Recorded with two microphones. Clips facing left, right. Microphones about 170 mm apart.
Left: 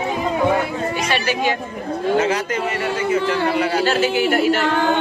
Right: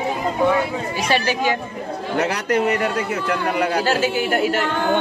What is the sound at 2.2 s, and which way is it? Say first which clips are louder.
Speech: right 1 dB; 65° right (ahead or behind).